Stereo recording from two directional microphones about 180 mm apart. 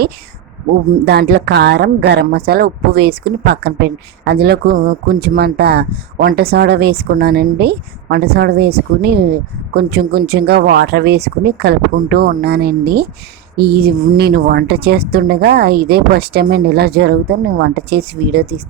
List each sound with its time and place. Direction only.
1.0 s a woman's voice: 65° right (ahead or behind)